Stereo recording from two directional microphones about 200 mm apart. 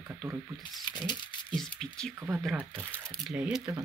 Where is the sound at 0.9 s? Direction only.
20° left (ahead or behind).